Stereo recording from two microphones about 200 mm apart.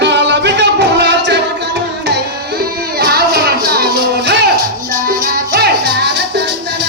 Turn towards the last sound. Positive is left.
turn(degrees=-55)  # may be behind; listen again after turning